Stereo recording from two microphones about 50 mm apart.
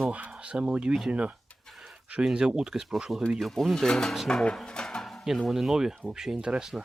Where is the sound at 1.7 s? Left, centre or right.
Centre.